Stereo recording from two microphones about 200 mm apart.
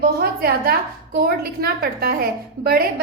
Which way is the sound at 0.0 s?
50° right (ahead or behind).